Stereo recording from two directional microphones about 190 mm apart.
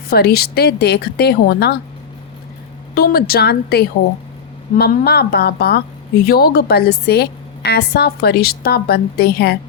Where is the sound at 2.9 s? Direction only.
50° left (ahead or behind).